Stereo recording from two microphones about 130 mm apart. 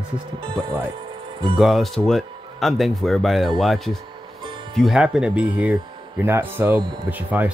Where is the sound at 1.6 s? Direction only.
Centre (ahead or behind).